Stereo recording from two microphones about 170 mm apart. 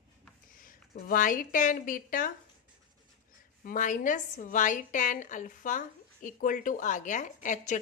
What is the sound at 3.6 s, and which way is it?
A woman's voice, 50° left (ahead or behind).